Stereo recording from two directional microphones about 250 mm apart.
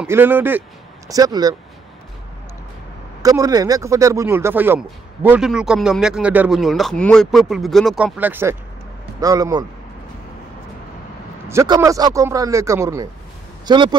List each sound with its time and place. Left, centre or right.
0.0 s a man's voice: centre
3.2 s speech: centre
11.4 s speech: centre